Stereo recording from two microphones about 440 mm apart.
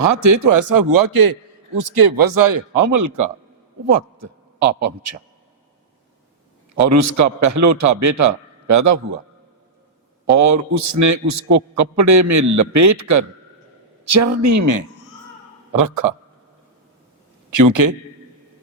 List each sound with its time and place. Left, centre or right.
0.1 s a man's voice: right
6.7 s a man's voice: right
10.2 s a man's voice: right
17.5 s a man's voice: right